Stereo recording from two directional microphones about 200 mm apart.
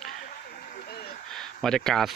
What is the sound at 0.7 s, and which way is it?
Vehicle, 50° left (ahead or behind).